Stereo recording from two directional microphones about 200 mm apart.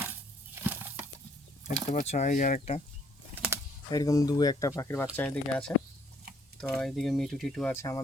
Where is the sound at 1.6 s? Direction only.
35° left (ahead or behind).